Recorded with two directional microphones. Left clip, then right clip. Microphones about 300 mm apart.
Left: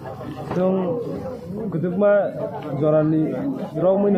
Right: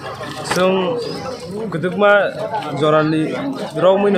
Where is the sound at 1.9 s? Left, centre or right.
Right.